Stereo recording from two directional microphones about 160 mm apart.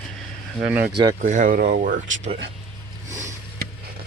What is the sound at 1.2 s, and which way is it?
Speech, 55° right (ahead or behind).